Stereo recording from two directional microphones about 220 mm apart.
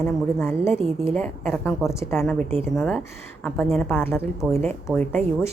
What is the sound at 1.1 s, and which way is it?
A woman's voice, 5° left (ahead or behind).